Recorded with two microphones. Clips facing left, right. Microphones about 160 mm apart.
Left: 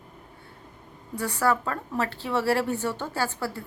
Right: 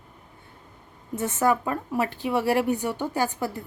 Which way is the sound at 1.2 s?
20° right (ahead or behind).